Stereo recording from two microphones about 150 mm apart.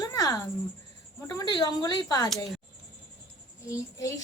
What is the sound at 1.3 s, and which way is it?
Speech, 25° left (ahead or behind).